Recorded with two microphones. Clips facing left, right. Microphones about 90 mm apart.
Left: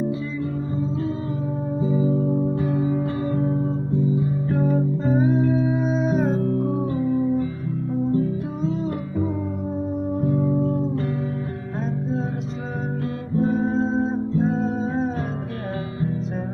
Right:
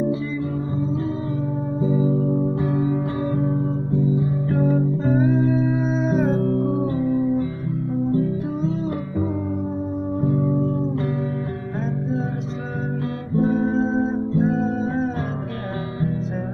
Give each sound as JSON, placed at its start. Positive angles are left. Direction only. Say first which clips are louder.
{"t": 2.4, "sound": "music", "louder": "right 1 dB", "side_deg": -15}
{"t": 4.5, "sound": "music", "louder": "right 2 dB", "side_deg": 0}
{"t": 6.3, "sound": "music", "louder": "right 2 dB", "side_deg": -45}
{"t": 13.4, "sound": "music", "louder": "right 1 dB", "side_deg": 0}